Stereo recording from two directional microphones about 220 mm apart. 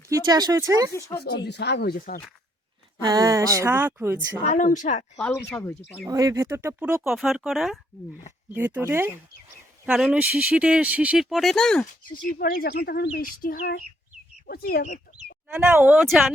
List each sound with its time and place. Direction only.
0.1 s speech: 20° right (ahead or behind)
0.9 s speech: 15° left (ahead or behind)
1.5 s speech: 50° left (ahead or behind)
3.0 s speech: 15° right (ahead or behind)
4.4 s speech: 35° left (ahead or behind)
5.1 s speech: 5° left (ahead or behind)
6.1 s speech: 15° right (ahead or behind); by 11.9 s centre (ahead or behind)
12.0 s speech: 40° left (ahead or behind)
15.5 s speech: 5° right (ahead or behind)